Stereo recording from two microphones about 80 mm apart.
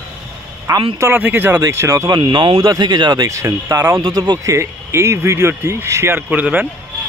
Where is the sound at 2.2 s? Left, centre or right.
Right.